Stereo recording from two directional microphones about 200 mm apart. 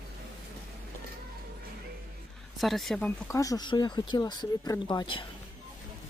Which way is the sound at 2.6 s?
Centre (ahead or behind).